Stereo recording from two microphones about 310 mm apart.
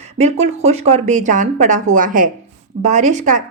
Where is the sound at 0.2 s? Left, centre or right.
Right.